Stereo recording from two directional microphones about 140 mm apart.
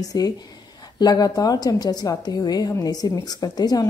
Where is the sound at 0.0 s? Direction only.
25° left (ahead or behind).